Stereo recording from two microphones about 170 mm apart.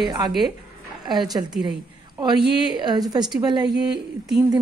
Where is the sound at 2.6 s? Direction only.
25° right (ahead or behind).